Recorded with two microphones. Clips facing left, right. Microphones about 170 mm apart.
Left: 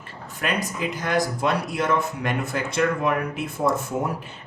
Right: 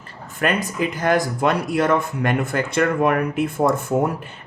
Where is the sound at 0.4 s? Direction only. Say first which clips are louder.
Right 5 dB; 55° right (ahead or behind).